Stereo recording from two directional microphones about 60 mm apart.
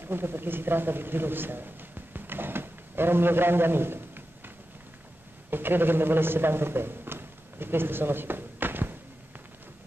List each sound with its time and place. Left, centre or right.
0.0 s a man's voice: right
5.5 s a man's voice: right